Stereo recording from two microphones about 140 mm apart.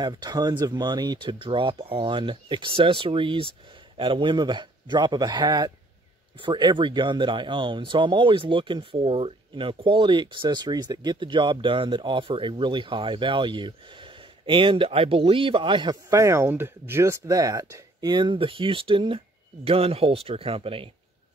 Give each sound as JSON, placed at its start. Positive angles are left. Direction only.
{"t": 0.0, "sound": "speech", "side_deg": -30}
{"t": 16.1, "sound": "speech", "side_deg": -20}
{"t": 18.1, "sound": "speech", "side_deg": -35}